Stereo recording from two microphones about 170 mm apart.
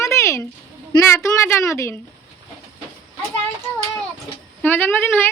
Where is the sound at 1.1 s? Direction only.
15° left (ahead or behind).